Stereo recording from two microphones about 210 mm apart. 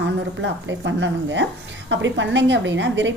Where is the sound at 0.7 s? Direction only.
60° right (ahead or behind).